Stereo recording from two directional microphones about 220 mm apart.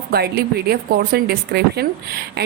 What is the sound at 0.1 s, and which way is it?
A woman's voice, 45° right (ahead or behind).